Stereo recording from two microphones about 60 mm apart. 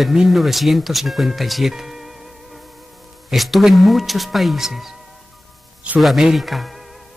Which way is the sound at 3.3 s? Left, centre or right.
Centre.